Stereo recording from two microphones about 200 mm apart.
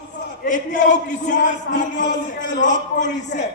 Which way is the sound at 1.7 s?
50° left (ahead or behind).